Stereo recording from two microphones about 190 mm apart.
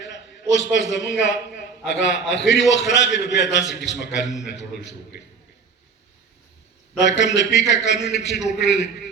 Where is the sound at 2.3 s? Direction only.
65° left (ahead or behind).